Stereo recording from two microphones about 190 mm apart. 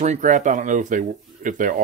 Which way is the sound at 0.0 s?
40° right (ahead or behind).